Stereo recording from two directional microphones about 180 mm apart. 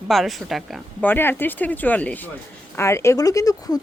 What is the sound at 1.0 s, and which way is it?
Speech, 10° left (ahead or behind).